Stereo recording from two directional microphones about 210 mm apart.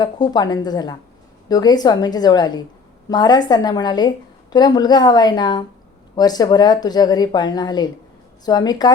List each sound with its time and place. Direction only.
0.0 s speech: 20° left (ahead or behind)